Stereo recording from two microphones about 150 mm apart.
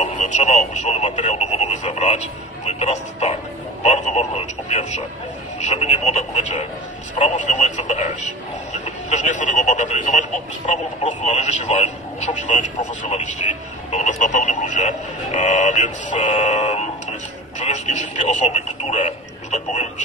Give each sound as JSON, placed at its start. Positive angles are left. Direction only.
{"t": 0.0, "sound": "speech", "side_deg": 50}